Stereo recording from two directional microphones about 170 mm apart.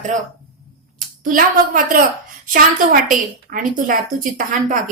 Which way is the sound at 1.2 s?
55° right (ahead or behind).